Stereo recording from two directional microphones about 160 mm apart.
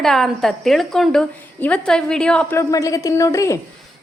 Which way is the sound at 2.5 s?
20° left (ahead or behind).